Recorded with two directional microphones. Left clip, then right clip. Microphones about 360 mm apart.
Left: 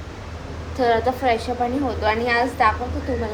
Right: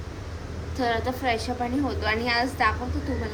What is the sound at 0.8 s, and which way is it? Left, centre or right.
A woman's voice, centre.